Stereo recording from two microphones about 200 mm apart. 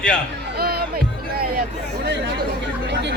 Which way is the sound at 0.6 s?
50° right (ahead or behind).